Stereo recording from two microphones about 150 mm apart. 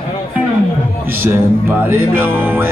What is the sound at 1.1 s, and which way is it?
Speech, 15° right (ahead or behind).